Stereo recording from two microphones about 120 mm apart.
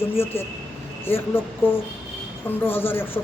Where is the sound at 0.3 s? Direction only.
20° left (ahead or behind).